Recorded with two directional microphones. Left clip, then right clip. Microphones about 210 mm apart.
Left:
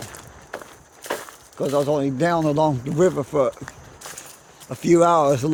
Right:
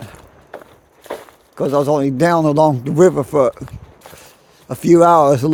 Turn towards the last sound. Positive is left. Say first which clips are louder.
# right 6 dB
turn(degrees=-35)  # may be behind; listen again after turning